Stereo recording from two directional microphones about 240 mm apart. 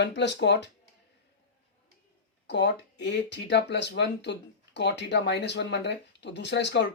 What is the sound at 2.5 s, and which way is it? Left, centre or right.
Speech, left.